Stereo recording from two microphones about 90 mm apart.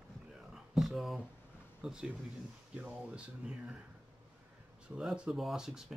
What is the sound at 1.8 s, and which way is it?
Speech, 10° right (ahead or behind).